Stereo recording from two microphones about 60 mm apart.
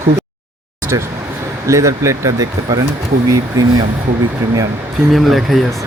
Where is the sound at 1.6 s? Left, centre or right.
Right.